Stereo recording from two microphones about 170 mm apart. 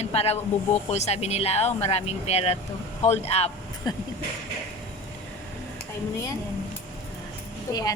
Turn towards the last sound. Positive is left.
turn(degrees=20)  # may be behind; listen again after turning